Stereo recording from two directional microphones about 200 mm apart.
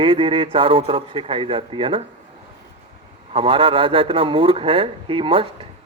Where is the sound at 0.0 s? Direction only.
25° right (ahead or behind).